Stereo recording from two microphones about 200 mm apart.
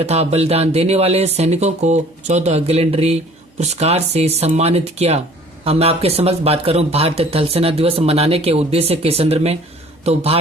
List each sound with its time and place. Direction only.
0.0 s speech: 30° right (ahead or behind)